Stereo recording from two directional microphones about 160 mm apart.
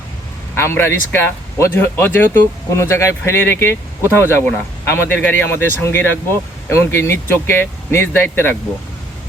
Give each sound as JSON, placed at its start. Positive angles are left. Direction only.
{"t": 0.5, "sound": "speech", "side_deg": 15}